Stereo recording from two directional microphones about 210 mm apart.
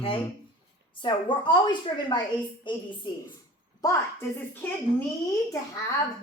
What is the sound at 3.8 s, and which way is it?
Speech, 15° left (ahead or behind).